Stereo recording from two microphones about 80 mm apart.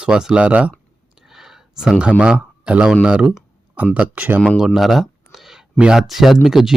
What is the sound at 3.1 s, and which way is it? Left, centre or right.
Speech, centre.